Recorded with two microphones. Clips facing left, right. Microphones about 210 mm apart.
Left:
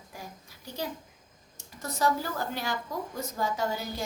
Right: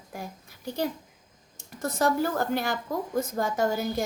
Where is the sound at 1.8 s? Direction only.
50° right (ahead or behind).